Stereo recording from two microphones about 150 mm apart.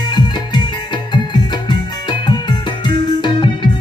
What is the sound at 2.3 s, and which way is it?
Music, 30° left (ahead or behind).